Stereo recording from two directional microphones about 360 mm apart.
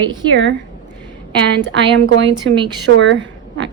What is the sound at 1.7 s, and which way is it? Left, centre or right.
Speech, right.